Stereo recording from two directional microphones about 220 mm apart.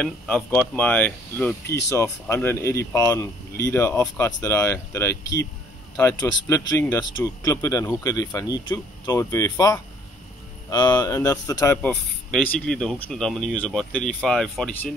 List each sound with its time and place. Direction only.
0.0 s speech: 5° left (ahead or behind)